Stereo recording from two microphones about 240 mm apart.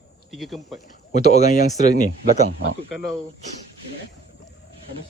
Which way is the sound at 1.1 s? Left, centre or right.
Left.